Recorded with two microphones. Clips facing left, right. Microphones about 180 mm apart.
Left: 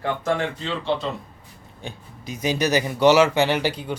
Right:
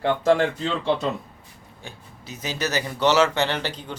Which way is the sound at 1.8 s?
15° left (ahead or behind).